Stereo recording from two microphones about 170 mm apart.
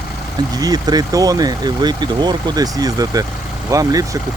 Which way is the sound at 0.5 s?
20° right (ahead or behind).